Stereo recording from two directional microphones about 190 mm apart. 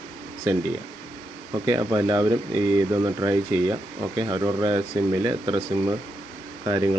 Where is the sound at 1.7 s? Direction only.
20° right (ahead or behind).